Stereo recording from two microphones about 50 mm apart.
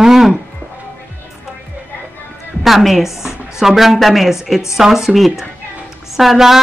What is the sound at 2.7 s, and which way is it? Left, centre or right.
Speech, centre.